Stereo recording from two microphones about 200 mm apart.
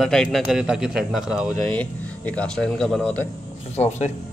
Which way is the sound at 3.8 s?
35° left (ahead or behind).